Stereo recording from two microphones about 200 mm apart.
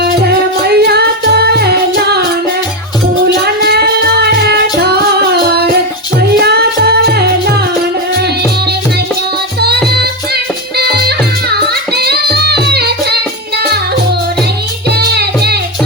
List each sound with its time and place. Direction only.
0.7 s music: 55° right (ahead or behind)
3.4 s a sound: 55° right (ahead or behind)
10.0 s music: 50° right (ahead or behind)
14.8 s music: 55° right (ahead or behind)